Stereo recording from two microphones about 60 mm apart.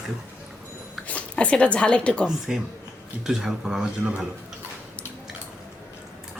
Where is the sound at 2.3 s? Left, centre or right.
Centre.